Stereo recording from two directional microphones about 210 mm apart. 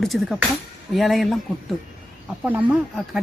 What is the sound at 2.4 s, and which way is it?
Speech, 5° right (ahead or behind).